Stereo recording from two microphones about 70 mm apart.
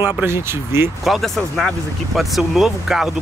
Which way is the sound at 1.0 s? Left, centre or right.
Centre.